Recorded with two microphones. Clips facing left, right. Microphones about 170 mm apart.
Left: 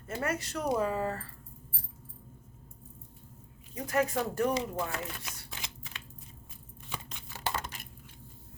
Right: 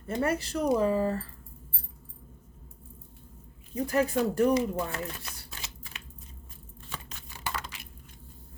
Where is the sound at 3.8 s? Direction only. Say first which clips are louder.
Right 4 dB; 35° right (ahead or behind).